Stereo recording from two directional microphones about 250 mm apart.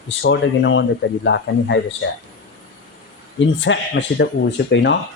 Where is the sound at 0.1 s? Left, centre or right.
Left.